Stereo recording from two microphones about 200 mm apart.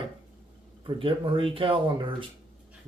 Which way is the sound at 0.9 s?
25° right (ahead or behind).